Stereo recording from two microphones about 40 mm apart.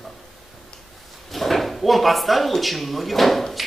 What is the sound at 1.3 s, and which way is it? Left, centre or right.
Speech, centre.